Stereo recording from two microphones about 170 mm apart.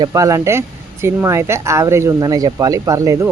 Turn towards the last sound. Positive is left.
turn(degrees=-20)  # may be behind; listen again after turning